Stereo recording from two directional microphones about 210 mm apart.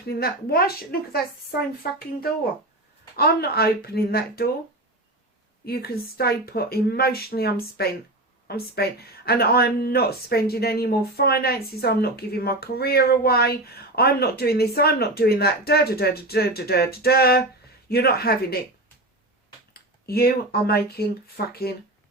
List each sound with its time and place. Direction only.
0.0 s speech: 45° left (ahead or behind)
3.2 s speech: 50° left (ahead or behind)
5.6 s speech: 45° left (ahead or behind)
19.7 s speech: 45° left (ahead or behind)